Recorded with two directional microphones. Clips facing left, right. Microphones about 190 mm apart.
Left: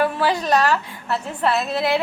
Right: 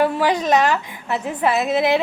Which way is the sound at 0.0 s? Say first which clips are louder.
Right 2 dB; 15° right (ahead or behind).